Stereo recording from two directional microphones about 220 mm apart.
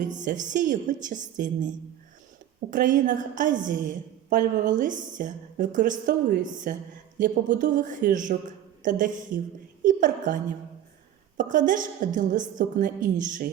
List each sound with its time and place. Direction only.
0.2 s a woman's voice: 35° right (ahead or behind)